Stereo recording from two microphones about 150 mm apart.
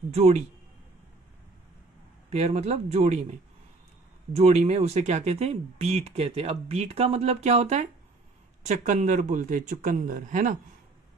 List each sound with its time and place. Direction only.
0.1 s speech: 45° right (ahead or behind)
2.3 s speech: 45° right (ahead or behind)